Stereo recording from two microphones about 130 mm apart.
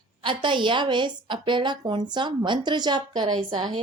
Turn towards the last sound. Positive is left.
turn(degrees=-35)  # may be behind; listen again after turning